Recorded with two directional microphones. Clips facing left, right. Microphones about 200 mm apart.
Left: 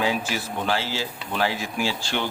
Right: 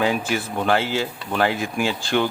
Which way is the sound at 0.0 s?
55° right (ahead or behind).